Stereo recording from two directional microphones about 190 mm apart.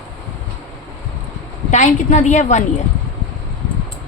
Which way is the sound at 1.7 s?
40° left (ahead or behind).